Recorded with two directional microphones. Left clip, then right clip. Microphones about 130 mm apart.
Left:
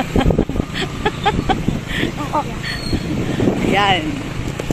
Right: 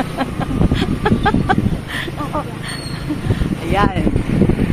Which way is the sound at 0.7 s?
15° right (ahead or behind).